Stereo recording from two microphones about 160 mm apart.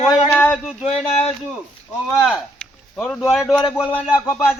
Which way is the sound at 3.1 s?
Centre (ahead or behind).